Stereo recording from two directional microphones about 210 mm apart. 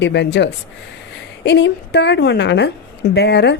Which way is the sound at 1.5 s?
55° left (ahead or behind).